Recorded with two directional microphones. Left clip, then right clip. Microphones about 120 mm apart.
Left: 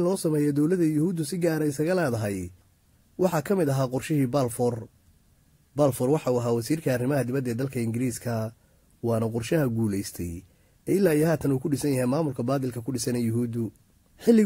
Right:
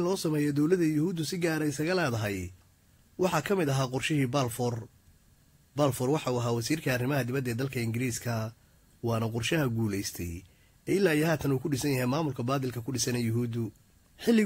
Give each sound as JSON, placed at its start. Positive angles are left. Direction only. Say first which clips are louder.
{"t": 0.0, "sound": "speech", "louder": "left 4 dB", "side_deg": 35}
{"t": 5.8, "sound": "speech", "louder": "left 5 dB", "side_deg": 40}